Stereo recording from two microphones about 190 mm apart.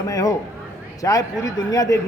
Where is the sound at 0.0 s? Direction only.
15° left (ahead or behind).